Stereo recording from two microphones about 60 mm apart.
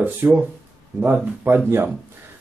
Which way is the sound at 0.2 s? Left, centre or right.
Right.